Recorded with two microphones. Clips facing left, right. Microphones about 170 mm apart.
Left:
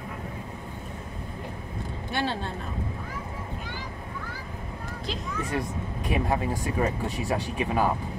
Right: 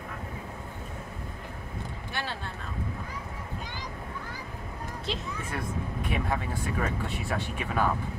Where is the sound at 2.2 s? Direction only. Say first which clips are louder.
Left 8 dB; 20° left (ahead or behind).